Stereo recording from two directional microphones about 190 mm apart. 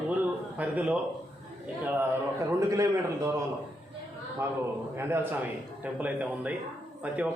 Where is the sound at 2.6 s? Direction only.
15° right (ahead or behind).